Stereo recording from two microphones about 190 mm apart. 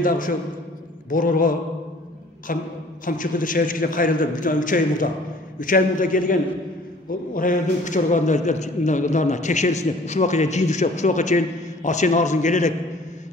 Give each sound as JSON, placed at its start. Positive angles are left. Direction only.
{"t": 1.1, "sound": "a man's voice", "side_deg": 45}